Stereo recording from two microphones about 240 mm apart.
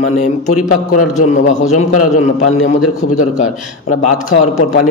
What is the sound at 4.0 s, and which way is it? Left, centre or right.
Speech, left.